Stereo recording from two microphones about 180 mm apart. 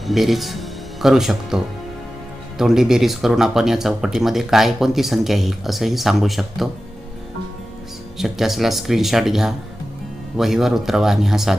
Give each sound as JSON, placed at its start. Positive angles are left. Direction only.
{"t": 0.1, "sound": "speech", "side_deg": 0}
{"t": 8.2, "sound": "speech", "side_deg": 0}